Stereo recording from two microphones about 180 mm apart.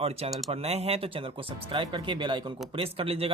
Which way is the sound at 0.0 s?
35° right (ahead or behind).